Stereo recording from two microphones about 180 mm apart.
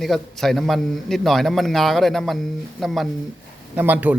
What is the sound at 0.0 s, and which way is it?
A man's voice, centre (ahead or behind).